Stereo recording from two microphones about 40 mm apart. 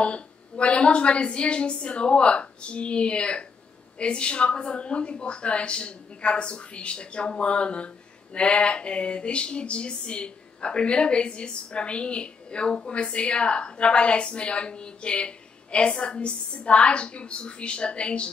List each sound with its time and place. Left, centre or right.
0.0 s a woman's voice: left